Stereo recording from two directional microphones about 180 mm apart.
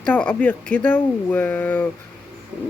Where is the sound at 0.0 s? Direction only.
10° left (ahead or behind).